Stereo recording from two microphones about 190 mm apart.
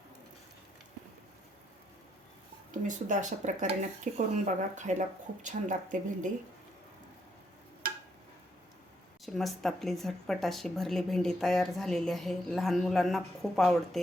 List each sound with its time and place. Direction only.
2.8 s speech: 40° right (ahead or behind)
9.2 s speech: centre (ahead or behind)